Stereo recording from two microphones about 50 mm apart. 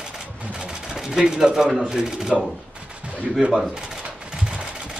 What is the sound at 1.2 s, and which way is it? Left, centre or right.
A man's voice, centre.